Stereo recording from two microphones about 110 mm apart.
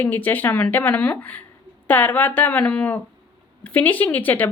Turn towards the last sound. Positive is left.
turn(degrees=15)  # may be behind; listen again after turning